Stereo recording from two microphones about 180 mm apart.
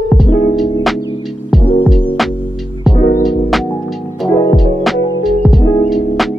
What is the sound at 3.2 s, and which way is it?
Music, centre (ahead or behind).